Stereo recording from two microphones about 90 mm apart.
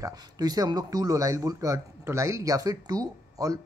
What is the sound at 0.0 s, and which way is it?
Speech, 45° right (ahead or behind).